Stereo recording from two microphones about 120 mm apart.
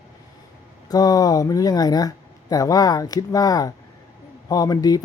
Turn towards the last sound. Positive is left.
turn(degrees=30)  # may be behind; listen again after turning